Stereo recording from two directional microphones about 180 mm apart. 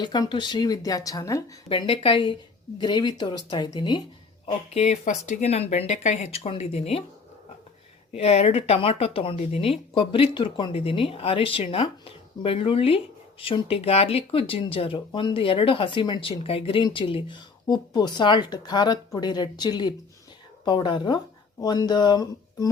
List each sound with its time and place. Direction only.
0.0 s speech: 25° left (ahead or behind)
1.7 s speech: 30° left (ahead or behind)
4.4 s speech: 40° left (ahead or behind)
8.1 s speech: 35° left (ahead or behind)